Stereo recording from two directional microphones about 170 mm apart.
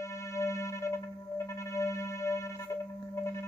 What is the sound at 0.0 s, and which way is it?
Music, 15° left (ahead or behind).